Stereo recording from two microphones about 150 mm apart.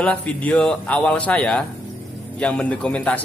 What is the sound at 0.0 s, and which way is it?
A man's voice, 10° left (ahead or behind).